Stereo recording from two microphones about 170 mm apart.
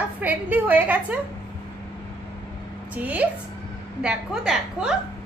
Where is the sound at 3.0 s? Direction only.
10° right (ahead or behind).